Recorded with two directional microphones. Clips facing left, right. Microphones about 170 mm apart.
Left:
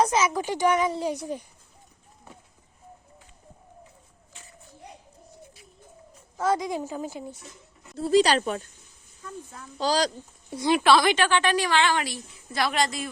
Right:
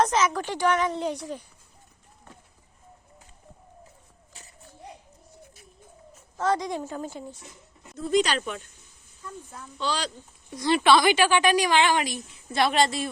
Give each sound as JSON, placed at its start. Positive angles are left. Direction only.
{"t": 0.0, "sound": "a woman's voice", "side_deg": 5}
{"t": 6.3, "sound": "a woman's voice", "side_deg": 15}
{"t": 7.9, "sound": "speech", "side_deg": 35}
{"t": 9.7, "sound": "speech", "side_deg": 40}
{"t": 10.7, "sound": "a woman's voice", "side_deg": 5}